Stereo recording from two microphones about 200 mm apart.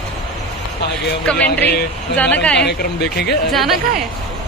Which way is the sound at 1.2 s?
5° left (ahead or behind).